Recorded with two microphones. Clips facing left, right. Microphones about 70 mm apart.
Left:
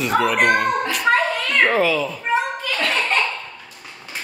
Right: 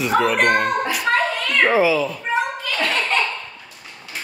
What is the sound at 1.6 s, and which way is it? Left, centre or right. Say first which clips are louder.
Speech: right 3 dB; centre.